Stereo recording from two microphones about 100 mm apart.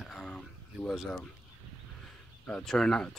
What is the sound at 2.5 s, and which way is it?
Speech, 5° left (ahead or behind).